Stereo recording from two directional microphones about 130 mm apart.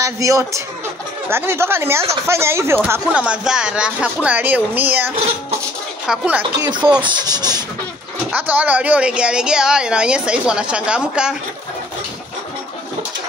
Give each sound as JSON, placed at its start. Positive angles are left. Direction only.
{"t": 0.0, "sound": "speech", "side_deg": -25}
{"t": 7.0, "sound": "speech", "side_deg": -35}
{"t": 8.3, "sound": "speech", "side_deg": -15}